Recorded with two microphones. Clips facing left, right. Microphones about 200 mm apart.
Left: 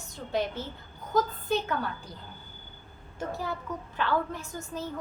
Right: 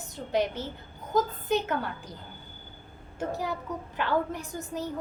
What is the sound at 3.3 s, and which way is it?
A woman's voice, 15° right (ahead or behind).